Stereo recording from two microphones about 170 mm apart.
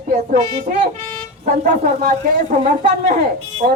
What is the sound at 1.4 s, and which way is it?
Speech, 45° right (ahead or behind).